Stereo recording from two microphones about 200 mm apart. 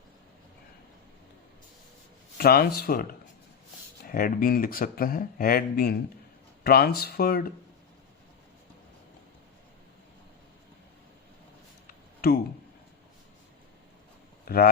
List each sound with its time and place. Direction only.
2.4 s speech: 50° left (ahead or behind)
11.9 s a sound: 50° left (ahead or behind)
14.4 s speech: 50° left (ahead or behind)